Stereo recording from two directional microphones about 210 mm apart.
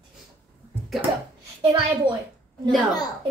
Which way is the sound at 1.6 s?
25° right (ahead or behind).